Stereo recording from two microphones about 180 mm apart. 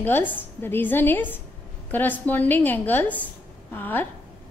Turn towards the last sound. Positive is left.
turn(degrees=10)  # may be behind; listen again after turning